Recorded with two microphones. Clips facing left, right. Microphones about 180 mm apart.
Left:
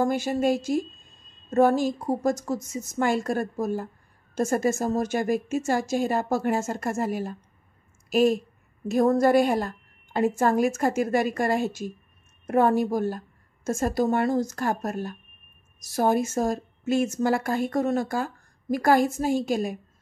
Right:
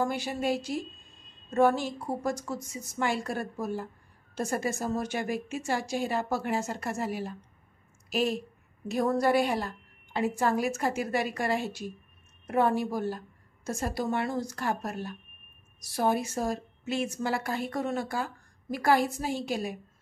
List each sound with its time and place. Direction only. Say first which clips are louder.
0.0 s a woman's voice: left 6 dB; 45° left (ahead or behind)